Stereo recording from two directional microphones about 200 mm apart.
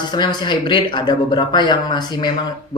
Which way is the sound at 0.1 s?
20° left (ahead or behind).